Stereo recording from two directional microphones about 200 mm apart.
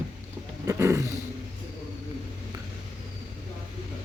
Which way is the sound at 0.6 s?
15° right (ahead or behind).